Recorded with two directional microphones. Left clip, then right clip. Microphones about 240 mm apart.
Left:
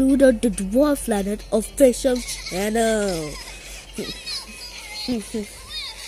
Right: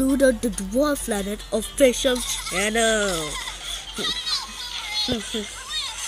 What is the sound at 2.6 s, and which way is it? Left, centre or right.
Speech, left.